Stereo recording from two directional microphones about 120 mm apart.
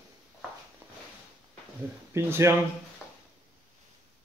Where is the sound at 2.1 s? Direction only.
20° right (ahead or behind).